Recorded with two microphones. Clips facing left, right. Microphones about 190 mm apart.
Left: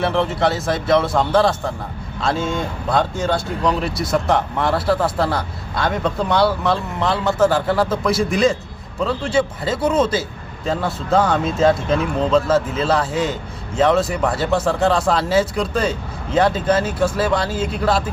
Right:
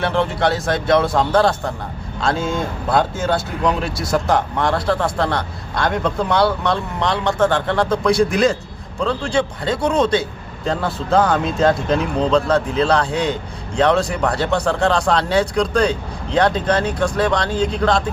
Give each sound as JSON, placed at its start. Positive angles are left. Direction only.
{"t": 0.0, "sound": "speech", "side_deg": 0}